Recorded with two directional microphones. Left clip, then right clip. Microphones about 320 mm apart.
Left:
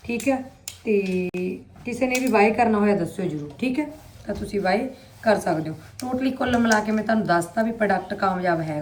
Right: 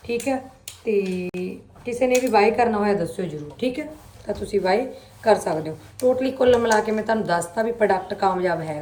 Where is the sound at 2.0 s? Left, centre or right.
Right.